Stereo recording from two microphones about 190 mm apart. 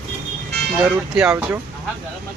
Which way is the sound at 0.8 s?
5° right (ahead or behind).